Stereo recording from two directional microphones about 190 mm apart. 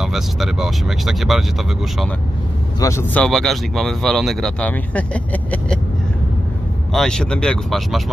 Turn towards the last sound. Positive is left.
turn(degrees=0)  # may be behind; listen again after turning